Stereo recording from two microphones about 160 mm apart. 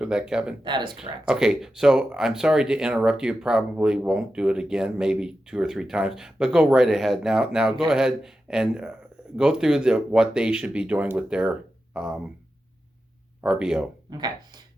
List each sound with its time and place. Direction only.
0.0 s speech: 5° right (ahead or behind)
0.6 s speech: 30° right (ahead or behind)
1.3 s speech: 5° right (ahead or behind)
13.4 s speech: 5° right (ahead or behind)
14.1 s speech: 25° right (ahead or behind)